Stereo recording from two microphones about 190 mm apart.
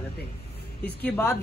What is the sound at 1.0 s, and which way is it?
Speech, 10° left (ahead or behind).